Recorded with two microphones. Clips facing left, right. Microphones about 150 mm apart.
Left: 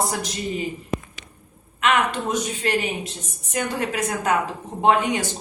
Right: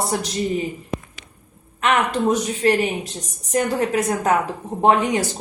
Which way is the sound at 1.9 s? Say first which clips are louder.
Right 3 dB; 35° right (ahead or behind).